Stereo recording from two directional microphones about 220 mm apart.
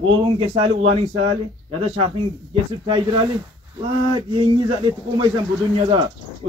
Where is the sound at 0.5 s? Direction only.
25° right (ahead or behind).